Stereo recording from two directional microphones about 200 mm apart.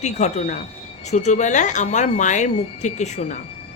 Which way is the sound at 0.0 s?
35° left (ahead or behind).